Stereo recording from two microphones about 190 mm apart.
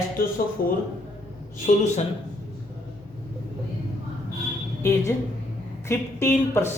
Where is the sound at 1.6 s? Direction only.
35° left (ahead or behind).